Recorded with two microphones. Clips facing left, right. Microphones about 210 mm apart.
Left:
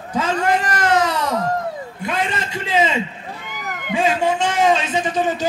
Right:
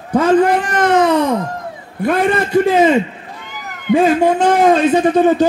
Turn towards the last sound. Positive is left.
turn(degrees=-60)  # may be behind; listen again after turning